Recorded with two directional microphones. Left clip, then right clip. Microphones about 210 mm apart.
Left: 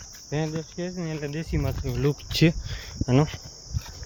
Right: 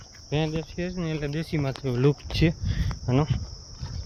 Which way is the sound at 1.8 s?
40° right (ahead or behind).